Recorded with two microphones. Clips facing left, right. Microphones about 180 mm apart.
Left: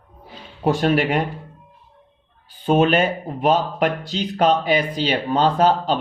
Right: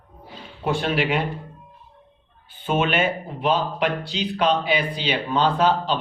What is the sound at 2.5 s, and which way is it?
Speech, 35° left (ahead or behind).